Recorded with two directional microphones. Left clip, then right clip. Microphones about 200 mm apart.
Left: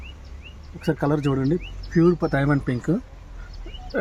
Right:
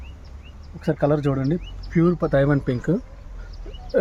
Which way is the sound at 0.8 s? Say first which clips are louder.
Right 2 dB; 35° right (ahead or behind).